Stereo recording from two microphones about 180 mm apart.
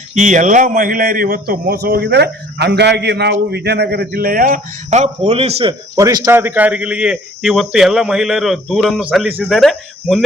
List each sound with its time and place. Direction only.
0.1 s a man's voice: 45° right (ahead or behind)
5.3 s a man's voice: 35° right (ahead or behind)
6.0 s speech: 20° right (ahead or behind); by 10.2 s centre (ahead or behind)